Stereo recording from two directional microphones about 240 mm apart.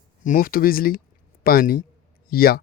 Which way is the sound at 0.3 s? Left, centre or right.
Left.